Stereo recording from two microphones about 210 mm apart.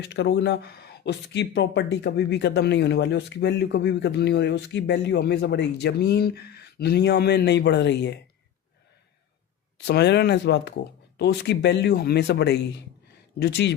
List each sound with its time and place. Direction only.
0.0 s speech: 55° left (ahead or behind)
9.7 s speech: 55° left (ahead or behind)